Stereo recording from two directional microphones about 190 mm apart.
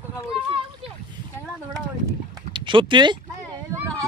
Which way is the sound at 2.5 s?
25° right (ahead or behind).